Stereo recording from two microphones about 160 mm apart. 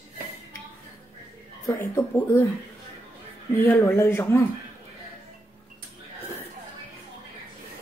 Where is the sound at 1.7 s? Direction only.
15° left (ahead or behind).